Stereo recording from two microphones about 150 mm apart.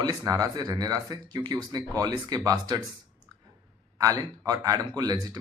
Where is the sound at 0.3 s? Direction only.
25° right (ahead or behind).